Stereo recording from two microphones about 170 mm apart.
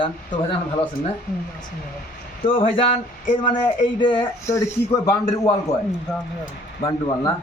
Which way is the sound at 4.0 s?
30° left (ahead or behind).